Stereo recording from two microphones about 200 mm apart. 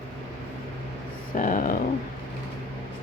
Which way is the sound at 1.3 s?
40° left (ahead or behind).